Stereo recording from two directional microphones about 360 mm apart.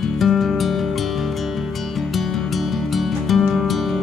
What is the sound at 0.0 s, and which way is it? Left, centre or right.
Music, centre.